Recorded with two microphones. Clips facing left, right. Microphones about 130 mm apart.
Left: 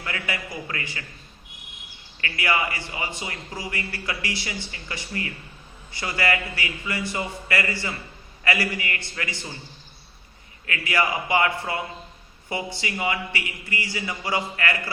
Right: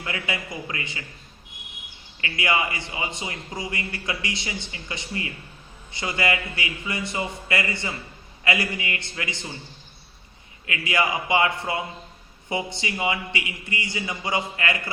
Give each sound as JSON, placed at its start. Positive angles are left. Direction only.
{"t": 0.0, "sound": "a man's voice", "side_deg": -20}
{"t": 2.2, "sound": "a man's voice", "side_deg": -20}
{"t": 10.7, "sound": "a man's voice", "side_deg": -20}